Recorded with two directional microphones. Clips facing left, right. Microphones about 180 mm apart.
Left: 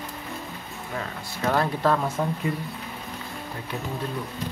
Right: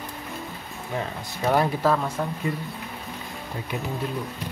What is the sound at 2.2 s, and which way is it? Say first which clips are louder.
Speech: left 2 dB; 5° left (ahead or behind).